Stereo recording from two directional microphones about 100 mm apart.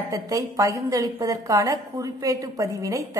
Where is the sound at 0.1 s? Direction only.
35° right (ahead or behind).